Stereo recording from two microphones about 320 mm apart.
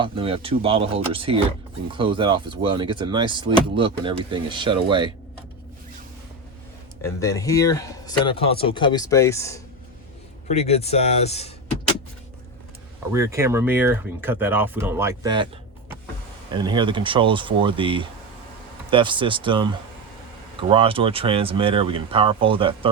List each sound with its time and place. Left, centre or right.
0.0 s speech: centre
7.0 s speech: centre
10.5 s speech: centre
13.1 s speech: centre
16.5 s speech: centre